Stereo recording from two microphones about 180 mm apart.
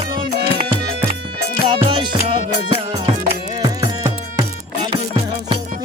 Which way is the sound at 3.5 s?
25° right (ahead or behind).